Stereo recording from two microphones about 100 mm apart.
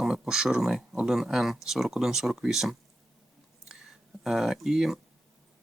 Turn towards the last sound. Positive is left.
turn(degrees=-5)  # may be behind; listen again after turning